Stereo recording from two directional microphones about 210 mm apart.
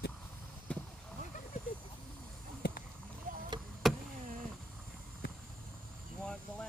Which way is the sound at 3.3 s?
40° right (ahead or behind).